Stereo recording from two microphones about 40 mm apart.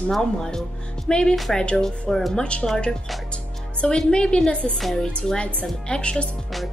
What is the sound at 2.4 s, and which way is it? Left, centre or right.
Speech, left.